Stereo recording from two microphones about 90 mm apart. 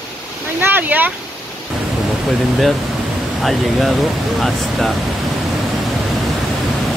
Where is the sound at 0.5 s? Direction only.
20° right (ahead or behind).